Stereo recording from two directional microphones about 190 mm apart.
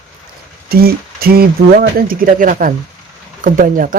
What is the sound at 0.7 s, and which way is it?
Speech, 55° right (ahead or behind).